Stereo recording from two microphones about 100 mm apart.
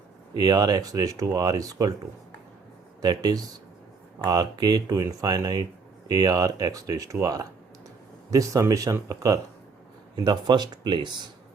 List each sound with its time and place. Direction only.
0.3 s speech: 40° right (ahead or behind)
3.0 s speech: 40° right (ahead or behind)